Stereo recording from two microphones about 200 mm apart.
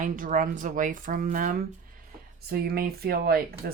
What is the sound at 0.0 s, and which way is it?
Speech, 40° right (ahead or behind).